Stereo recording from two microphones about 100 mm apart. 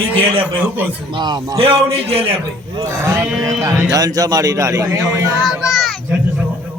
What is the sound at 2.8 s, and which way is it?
A man's voice, 30° right (ahead or behind).